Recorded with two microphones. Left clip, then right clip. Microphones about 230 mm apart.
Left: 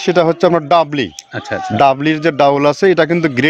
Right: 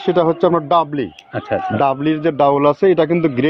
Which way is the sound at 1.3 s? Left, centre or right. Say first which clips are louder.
Right 1 dB; left.